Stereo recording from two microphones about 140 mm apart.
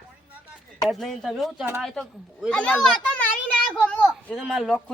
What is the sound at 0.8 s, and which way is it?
A child's voice, centre (ahead or behind).